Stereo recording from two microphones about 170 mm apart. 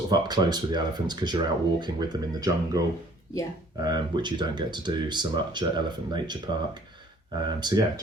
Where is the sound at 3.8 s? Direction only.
25° right (ahead or behind).